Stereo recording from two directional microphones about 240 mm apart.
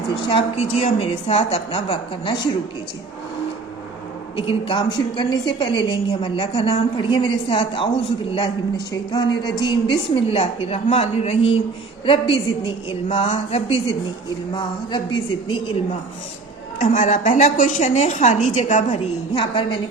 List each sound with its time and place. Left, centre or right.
0.3 s a woman's voice: left
4.4 s a woman's voice: left
16.8 s a woman's voice: left